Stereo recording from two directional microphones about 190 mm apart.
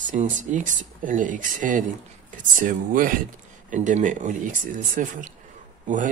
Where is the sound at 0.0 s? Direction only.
40° right (ahead or behind).